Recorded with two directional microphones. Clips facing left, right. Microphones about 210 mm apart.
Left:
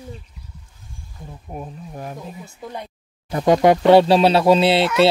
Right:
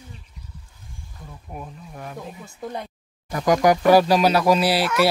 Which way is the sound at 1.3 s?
30° left (ahead or behind).